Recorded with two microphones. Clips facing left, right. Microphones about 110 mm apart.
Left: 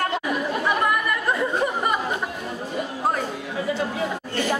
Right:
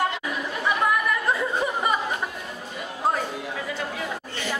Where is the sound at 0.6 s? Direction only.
Centre (ahead or behind).